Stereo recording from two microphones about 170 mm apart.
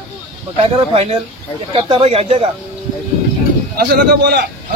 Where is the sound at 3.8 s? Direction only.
60° right (ahead or behind).